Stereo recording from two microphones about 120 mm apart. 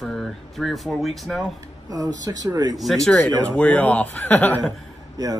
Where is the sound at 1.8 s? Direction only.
30° right (ahead or behind).